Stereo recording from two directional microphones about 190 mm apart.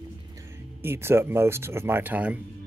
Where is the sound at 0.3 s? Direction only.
15° right (ahead or behind).